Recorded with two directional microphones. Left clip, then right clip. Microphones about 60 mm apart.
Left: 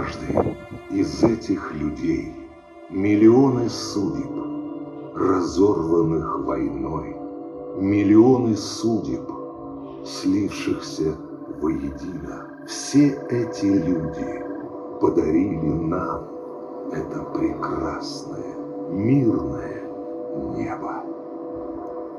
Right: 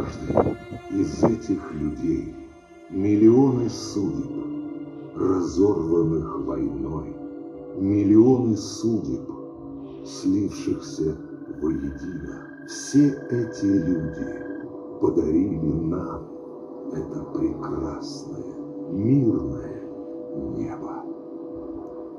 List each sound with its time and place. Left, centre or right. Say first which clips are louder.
1.0 s speech: left 2 dB; left
10.2 s speech: left 1 dB; left
12.9 s speech: left 2 dB; left
15.0 s speech: left 2 dB; left
18.9 s speech: left 1 dB; left